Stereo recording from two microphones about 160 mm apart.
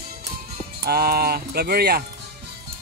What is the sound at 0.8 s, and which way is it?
Speech, 75° right (ahead or behind).